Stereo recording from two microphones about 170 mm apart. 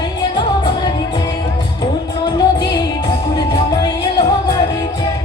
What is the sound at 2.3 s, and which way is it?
Music, 25° left (ahead or behind).